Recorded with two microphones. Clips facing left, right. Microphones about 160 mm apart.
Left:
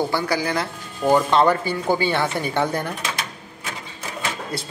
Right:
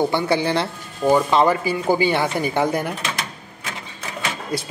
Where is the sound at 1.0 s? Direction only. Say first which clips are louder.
Right 1 dB; 5° right (ahead or behind).